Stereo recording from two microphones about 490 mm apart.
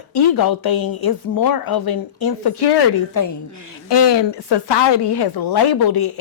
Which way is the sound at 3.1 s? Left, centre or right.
Left.